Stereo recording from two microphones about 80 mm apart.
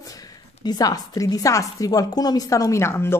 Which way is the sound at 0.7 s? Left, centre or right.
Left.